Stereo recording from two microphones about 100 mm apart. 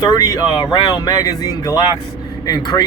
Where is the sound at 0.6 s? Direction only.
50° left (ahead or behind).